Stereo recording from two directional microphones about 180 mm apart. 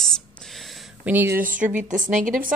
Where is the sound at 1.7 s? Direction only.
45° right (ahead or behind).